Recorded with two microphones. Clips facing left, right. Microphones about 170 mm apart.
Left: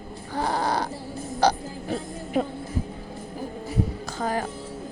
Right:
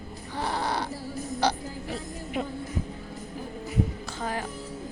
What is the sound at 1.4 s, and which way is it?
Speech, 40° left (ahead or behind).